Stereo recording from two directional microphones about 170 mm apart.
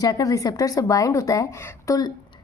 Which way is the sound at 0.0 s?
20° left (ahead or behind).